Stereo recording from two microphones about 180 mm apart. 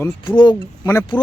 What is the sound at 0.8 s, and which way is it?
Speech, 15° left (ahead or behind).